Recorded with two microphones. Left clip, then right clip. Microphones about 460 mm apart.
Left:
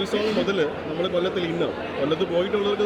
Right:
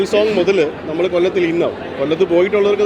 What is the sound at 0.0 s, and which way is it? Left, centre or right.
A man's voice, right.